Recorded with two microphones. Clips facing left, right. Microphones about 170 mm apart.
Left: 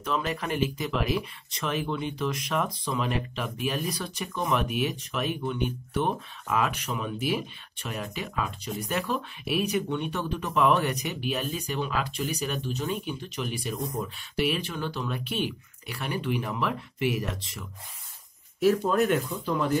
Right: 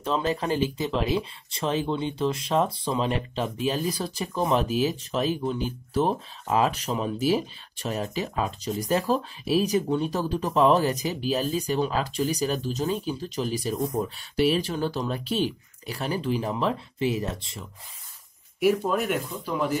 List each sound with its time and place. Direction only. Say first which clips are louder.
0.0 s speech: right 4 dB; 30° right (ahead or behind)
18.6 s speech: even; 10° right (ahead or behind)